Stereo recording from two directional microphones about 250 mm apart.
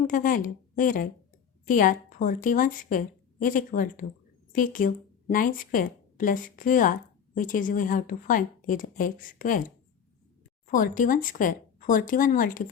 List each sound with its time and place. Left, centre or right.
0.1 s a woman's voice: left